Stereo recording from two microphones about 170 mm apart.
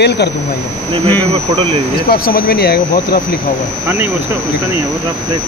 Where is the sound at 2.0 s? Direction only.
60° left (ahead or behind).